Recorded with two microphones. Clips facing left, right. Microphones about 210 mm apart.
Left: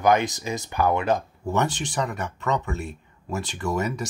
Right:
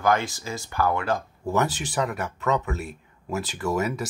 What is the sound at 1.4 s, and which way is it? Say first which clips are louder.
Speech: even; 5° right (ahead or behind).